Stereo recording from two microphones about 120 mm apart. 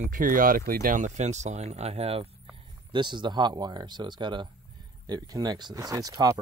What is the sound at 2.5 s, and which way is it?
Speech, 40° right (ahead or behind).